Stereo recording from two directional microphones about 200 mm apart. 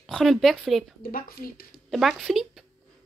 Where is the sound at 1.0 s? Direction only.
45° left (ahead or behind).